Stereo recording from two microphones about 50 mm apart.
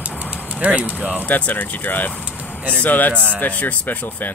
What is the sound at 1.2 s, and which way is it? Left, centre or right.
Speech, left.